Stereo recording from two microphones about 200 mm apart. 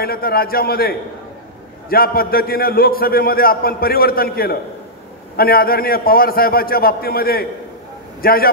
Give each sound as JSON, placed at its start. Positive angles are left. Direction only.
{"t": 0.0, "sound": "a man's voice", "side_deg": 50}